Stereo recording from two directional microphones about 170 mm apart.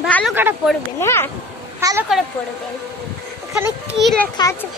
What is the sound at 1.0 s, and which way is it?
Speech, 15° left (ahead or behind).